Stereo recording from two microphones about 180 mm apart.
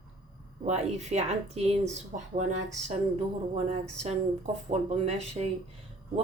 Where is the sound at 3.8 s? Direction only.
40° right (ahead or behind).